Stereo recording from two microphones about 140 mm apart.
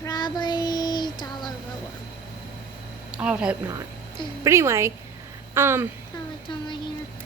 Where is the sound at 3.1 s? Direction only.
5° right (ahead or behind).